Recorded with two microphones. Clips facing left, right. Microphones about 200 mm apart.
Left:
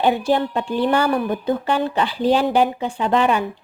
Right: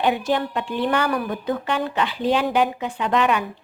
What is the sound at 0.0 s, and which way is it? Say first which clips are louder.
A woman's voice: left 3 dB; 30° left (ahead or behind).